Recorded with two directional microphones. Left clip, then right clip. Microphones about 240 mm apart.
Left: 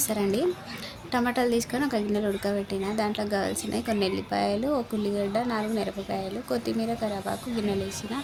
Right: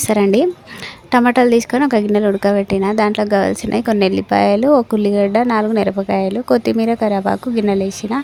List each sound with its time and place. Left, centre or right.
0.1 s a woman's voice: right